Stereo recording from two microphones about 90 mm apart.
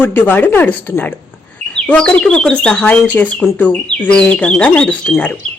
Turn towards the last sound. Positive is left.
turn(degrees=10)  # may be behind; listen again after turning